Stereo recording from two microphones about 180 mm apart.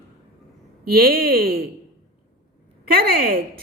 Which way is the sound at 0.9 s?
60° right (ahead or behind).